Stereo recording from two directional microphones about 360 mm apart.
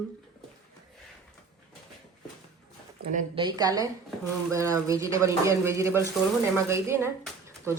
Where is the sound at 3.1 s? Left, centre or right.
Centre.